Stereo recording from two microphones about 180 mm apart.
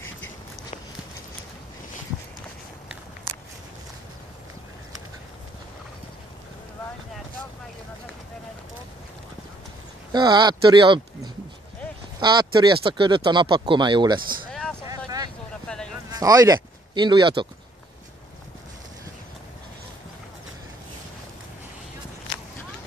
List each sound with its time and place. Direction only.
10.1 s speech: 25° right (ahead or behind)
12.2 s speech: 25° right (ahead or behind)
14.5 s vehicle: 5° left (ahead or behind)
14.9 s vehicle: 20° right (ahead or behind)
15.6 s a sound: 5° left (ahead or behind)
16.1 s speech: 20° right (ahead or behind)